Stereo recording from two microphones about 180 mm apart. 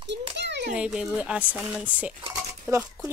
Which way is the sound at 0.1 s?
75° right (ahead or behind).